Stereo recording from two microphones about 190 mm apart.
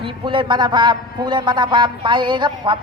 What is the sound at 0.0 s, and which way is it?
A man's voice, 25° right (ahead or behind).